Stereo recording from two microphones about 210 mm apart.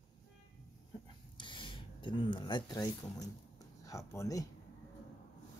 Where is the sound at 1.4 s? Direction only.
20° left (ahead or behind).